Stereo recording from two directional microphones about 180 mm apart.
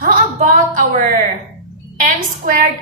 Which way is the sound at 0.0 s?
45° right (ahead or behind).